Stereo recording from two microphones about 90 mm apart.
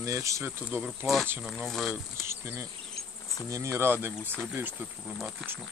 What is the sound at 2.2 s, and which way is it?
Speech, 30° right (ahead or behind).